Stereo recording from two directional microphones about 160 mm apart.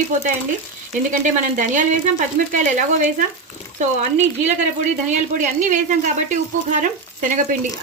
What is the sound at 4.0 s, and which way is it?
Speech, 45° right (ahead or behind).